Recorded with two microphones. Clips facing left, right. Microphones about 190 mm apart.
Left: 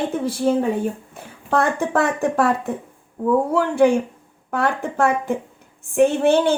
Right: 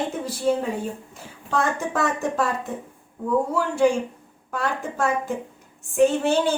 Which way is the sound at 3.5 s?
60° left (ahead or behind).